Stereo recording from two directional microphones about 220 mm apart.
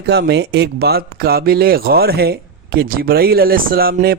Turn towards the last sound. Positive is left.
turn(degrees=-45)  # may be behind; listen again after turning